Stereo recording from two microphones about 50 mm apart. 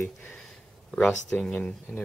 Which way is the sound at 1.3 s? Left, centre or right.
Left.